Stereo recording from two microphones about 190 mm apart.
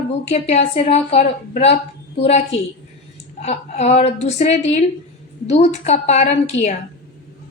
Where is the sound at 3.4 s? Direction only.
35° left (ahead or behind).